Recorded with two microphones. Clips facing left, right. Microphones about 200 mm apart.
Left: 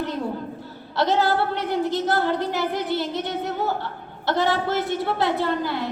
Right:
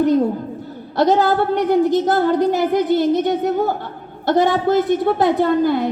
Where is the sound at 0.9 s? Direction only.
45° right (ahead or behind).